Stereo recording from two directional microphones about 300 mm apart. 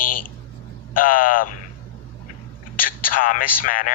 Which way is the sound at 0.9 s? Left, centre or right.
Left.